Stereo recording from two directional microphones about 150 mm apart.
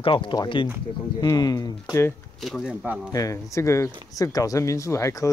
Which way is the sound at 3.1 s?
20° left (ahead or behind).